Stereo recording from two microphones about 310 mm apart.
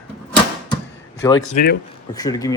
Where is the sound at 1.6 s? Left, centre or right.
Left.